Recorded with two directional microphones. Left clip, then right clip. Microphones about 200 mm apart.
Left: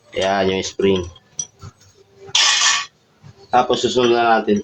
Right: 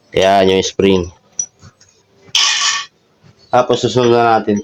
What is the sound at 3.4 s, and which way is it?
Speech, 45° right (ahead or behind).